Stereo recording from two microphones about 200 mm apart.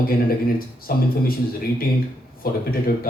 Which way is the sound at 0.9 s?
45° left (ahead or behind).